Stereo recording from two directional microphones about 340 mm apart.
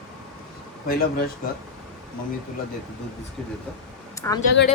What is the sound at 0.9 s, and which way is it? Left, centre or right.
Speech, left.